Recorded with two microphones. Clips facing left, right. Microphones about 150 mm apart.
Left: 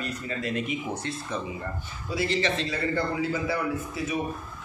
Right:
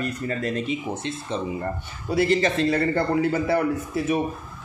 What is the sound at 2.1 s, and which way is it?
Speech, 50° right (ahead or behind).